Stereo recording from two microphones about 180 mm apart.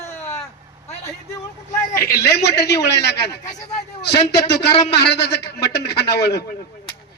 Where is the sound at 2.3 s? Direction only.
65° left (ahead or behind).